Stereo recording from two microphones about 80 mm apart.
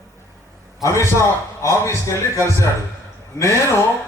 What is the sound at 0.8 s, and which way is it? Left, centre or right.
Music, left.